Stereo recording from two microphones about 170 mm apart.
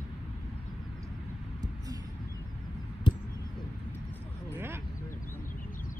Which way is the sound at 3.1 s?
25° left (ahead or behind).